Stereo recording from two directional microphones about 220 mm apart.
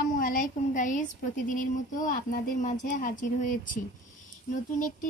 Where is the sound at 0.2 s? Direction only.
40° left (ahead or behind).